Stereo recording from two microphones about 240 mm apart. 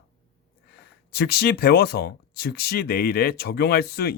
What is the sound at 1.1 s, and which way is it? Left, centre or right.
Speech, left.